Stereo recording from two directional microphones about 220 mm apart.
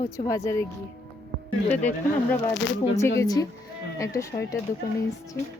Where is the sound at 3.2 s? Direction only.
15° left (ahead or behind).